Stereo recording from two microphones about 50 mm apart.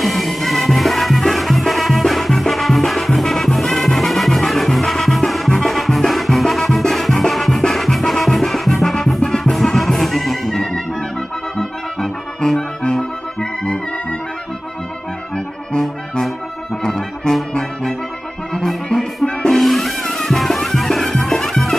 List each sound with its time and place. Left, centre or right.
0.0 s music: centre
5.5 s music: centre
11.5 s brass instrument: centre
16.8 s brass instrument: centre
19.5 s music: centre